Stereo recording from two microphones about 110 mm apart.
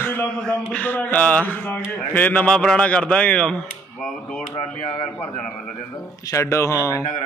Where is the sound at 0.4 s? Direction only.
5° left (ahead or behind).